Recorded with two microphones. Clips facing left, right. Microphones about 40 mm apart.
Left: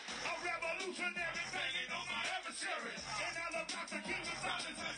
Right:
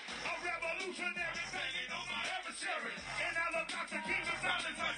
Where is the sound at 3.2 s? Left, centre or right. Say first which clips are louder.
Right 6 dB; right.